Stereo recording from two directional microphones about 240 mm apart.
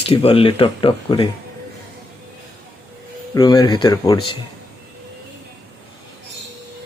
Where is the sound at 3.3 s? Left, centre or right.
Centre.